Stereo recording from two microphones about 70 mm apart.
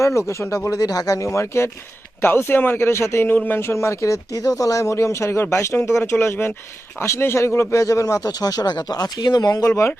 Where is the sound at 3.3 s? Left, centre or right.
Left.